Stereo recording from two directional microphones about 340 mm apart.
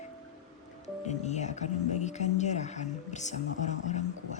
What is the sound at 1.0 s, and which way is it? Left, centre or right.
Speech, centre.